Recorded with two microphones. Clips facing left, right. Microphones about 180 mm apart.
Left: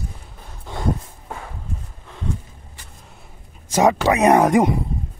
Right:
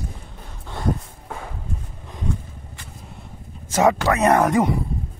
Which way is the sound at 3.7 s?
15° left (ahead or behind).